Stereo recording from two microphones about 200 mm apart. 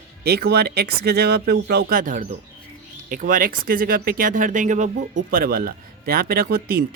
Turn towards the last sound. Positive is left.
turn(degrees=-50)  # may be behind; listen again after turning